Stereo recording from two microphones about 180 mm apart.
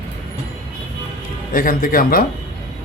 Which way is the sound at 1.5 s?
50° left (ahead or behind).